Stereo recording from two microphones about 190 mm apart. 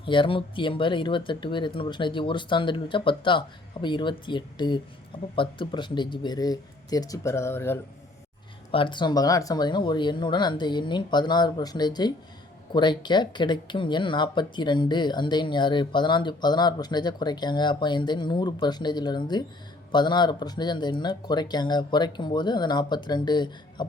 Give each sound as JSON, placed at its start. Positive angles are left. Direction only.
{"t": 0.0, "sound": "speech", "side_deg": 25}
{"t": 8.7, "sound": "speech", "side_deg": 25}